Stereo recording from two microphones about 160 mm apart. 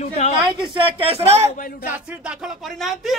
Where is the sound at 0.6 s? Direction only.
35° right (ahead or behind).